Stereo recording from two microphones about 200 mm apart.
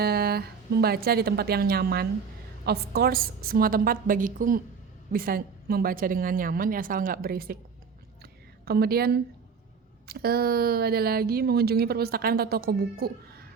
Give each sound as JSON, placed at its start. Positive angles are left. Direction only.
{"t": 0.0, "sound": "speech", "side_deg": -50}
{"t": 8.2, "sound": "a sound", "side_deg": -50}
{"t": 10.1, "sound": "speech", "side_deg": -50}